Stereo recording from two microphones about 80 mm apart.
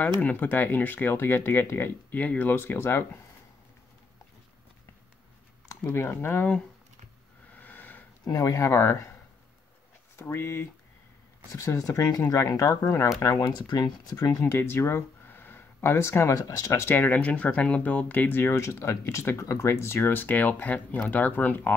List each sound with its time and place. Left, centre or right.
0.2 s speech: left
5.9 s speech: left
7.5 s a sound: left
8.3 s speech: left
10.1 s speech: left
13.5 s speech: left
14.4 s speech: left
15.8 s speech: left
16.3 s speech: left
16.8 s speech: left